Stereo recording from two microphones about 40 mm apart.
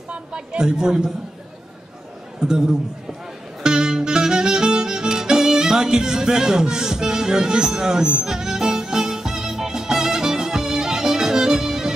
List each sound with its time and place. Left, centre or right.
0.3 s a man's voice: centre
2.4 s a man's voice: centre
3.6 s music: centre